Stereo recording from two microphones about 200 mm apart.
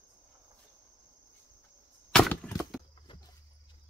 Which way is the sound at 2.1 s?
5° left (ahead or behind).